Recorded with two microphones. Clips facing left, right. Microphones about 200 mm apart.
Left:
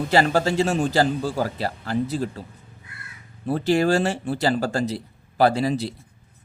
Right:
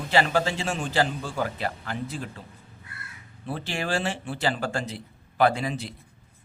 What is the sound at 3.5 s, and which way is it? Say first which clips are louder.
Speech: left 10 dB; 40° left (ahead or behind).